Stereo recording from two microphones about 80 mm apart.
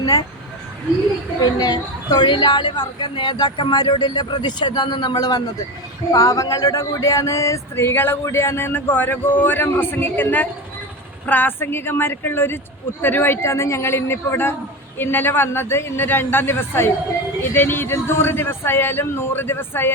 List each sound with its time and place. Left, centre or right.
0.0 s speech: left
1.5 s speech: left
6.1 s a sound: left
11.3 s speech: left
13.0 s a sound: left
14.9 s speech: left